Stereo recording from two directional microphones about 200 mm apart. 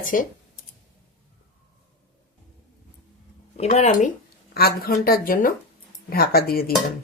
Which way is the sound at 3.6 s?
30° left (ahead or behind).